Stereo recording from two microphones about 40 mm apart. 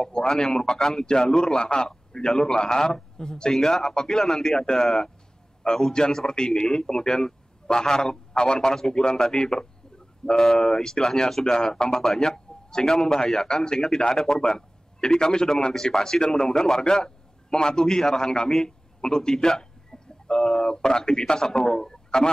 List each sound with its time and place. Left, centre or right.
0.0 s a man's voice: centre